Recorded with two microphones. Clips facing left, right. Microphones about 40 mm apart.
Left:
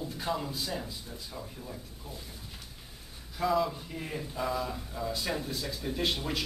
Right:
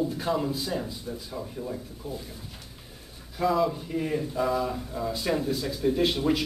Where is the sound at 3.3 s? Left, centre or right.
Centre.